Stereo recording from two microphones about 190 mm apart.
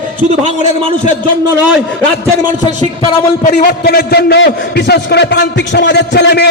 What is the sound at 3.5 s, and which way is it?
A man's voice, 55° left (ahead or behind).